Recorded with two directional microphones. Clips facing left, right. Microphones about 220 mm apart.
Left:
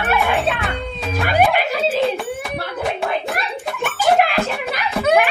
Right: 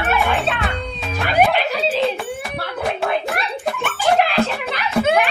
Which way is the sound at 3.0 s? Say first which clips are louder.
Right 1 dB; centre (ahead or behind).